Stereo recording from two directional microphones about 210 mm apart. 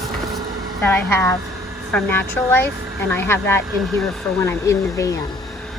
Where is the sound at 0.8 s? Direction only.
10° left (ahead or behind).